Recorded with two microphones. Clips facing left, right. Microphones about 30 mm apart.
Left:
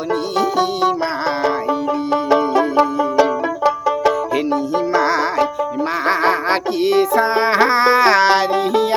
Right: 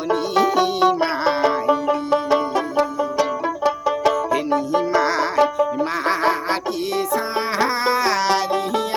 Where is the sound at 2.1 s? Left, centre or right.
Centre.